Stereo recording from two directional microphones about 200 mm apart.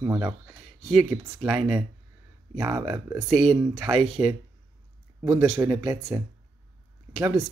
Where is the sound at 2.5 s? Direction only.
15° right (ahead or behind).